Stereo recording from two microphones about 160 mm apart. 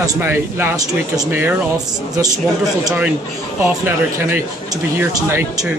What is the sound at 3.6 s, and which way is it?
Speech, 15° right (ahead or behind).